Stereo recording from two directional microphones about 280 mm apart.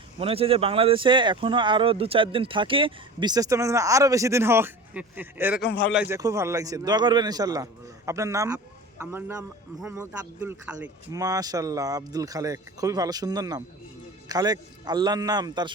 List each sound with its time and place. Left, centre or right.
0.2 s speech: centre